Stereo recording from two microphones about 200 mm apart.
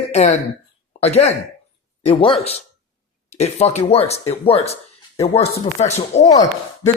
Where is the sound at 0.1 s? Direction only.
35° left (ahead or behind).